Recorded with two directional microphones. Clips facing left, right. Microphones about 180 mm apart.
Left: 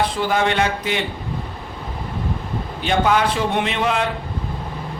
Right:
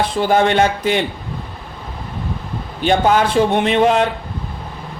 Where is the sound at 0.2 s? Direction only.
30° right (ahead or behind).